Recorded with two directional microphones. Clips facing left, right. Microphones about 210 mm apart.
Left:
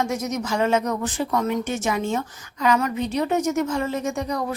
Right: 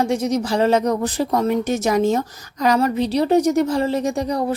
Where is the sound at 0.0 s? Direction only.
30° right (ahead or behind).